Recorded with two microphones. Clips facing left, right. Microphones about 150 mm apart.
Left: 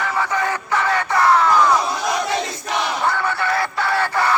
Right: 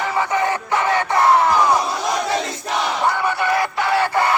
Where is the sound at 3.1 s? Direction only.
15° right (ahead or behind).